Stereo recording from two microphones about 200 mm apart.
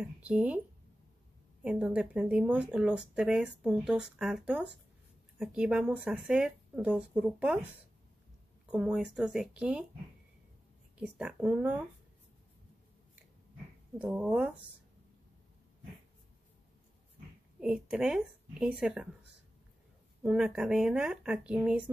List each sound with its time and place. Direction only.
0.0 s speech: 5° right (ahead or behind)
1.6 s speech: 5° right (ahead or behind)
8.7 s speech: 5° right (ahead or behind)
11.0 s speech: 5° right (ahead or behind)
13.9 s speech: 5° right (ahead or behind)
17.6 s speech: 5° right (ahead or behind)
20.2 s speech: 5° right (ahead or behind)